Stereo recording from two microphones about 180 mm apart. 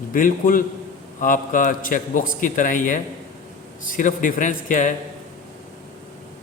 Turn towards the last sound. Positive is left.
turn(degrees=45)  # may be behind; listen again after turning